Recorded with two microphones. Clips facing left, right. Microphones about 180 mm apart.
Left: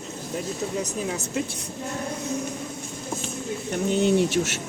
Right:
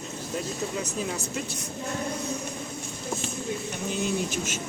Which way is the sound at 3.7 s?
65° left (ahead or behind).